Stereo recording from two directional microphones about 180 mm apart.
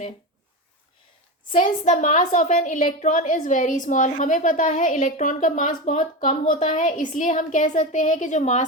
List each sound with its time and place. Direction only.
1.5 s a woman's voice: 40° left (ahead or behind)